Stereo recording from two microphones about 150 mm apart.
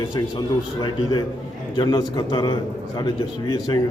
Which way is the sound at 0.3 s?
30° left (ahead or behind).